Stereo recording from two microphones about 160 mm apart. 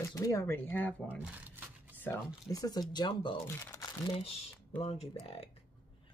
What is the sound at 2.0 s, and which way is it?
Speech, 25° left (ahead or behind).